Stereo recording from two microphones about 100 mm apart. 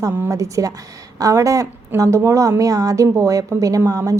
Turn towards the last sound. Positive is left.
turn(degrees=-35)  # may be behind; listen again after turning